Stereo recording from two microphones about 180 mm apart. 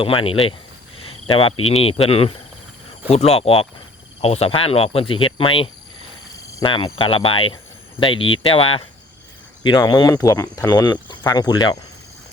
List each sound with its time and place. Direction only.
0.0 s cricket: 30° left (ahead or behind)
6.6 s speech: 30° left (ahead or behind)
9.6 s speech: 20° left (ahead or behind)